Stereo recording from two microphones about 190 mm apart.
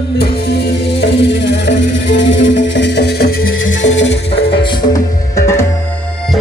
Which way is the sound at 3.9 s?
75° left (ahead or behind).